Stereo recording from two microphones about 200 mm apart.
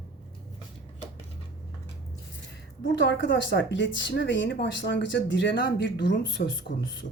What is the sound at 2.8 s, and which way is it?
A woman's voice, 65° left (ahead or behind).